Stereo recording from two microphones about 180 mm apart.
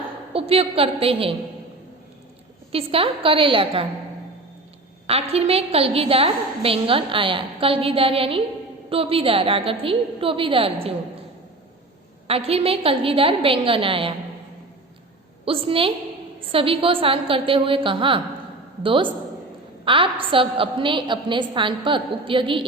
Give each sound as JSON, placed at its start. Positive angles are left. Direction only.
{"t": 0.3, "sound": "a woman's voice", "side_deg": -30}
{"t": 2.7, "sound": "a woman's voice", "side_deg": -30}
{"t": 5.0, "sound": "a woman's voice", "side_deg": -35}
{"t": 12.3, "sound": "a woman's voice", "side_deg": -30}
{"t": 15.4, "sound": "a woman's voice", "side_deg": -30}